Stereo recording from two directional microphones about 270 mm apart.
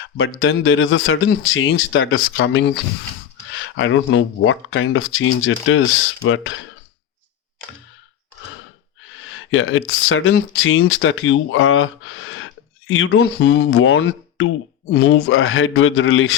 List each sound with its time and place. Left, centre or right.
0.0 s speech: left
9.2 s speech: left